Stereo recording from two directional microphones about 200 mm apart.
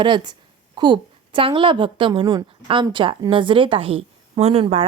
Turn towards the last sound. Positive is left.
turn(degrees=-30)  # may be behind; listen again after turning